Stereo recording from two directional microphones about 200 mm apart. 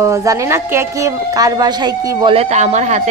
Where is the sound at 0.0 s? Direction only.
15° right (ahead or behind).